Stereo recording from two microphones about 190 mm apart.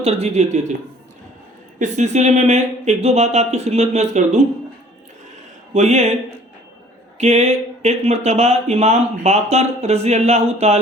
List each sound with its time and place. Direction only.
0.0 s speech: 35° right (ahead or behind)
1.8 s speech: 40° right (ahead or behind)
5.7 s speech: 35° right (ahead or behind)
7.2 s speech: 35° right (ahead or behind)